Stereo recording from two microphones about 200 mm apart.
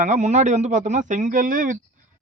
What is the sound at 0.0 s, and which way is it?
A man's voice, 35° right (ahead or behind).